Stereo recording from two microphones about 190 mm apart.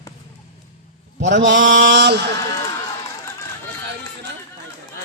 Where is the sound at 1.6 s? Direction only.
40° right (ahead or behind).